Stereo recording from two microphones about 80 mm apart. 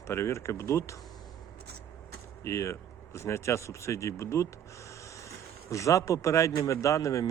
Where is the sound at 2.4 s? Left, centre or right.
Left.